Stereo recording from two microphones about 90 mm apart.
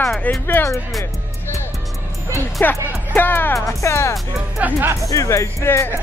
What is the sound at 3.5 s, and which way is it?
Speech, 35° left (ahead or behind).